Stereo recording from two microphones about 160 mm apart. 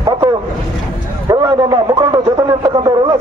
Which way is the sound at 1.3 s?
25° right (ahead or behind).